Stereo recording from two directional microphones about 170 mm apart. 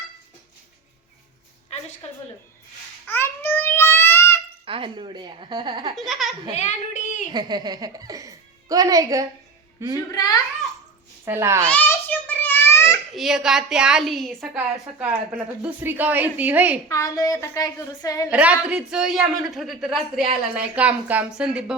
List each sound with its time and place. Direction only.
3.1 s babbling: 15° left (ahead or behind)
4.6 s a woman's voice: 30° right (ahead or behind)
6.0 s a woman's voice: centre (ahead or behind)
6.5 s a woman's voice: 45° left (ahead or behind)
7.3 s speech: 25° right (ahead or behind)
10.1 s a woman's voice: 25° left (ahead or behind)
11.3 s a woman's voice: 15° right (ahead or behind)
11.6 s a sound: 10° left (ahead or behind)
13.1 s a woman's voice: centre (ahead or behind)
16.9 s a woman's voice: 20° left (ahead or behind)
18.3 s a woman's voice: 10° right (ahead or behind)